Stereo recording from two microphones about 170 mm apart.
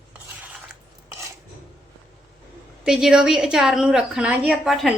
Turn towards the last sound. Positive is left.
turn(degrees=-5)  # may be behind; listen again after turning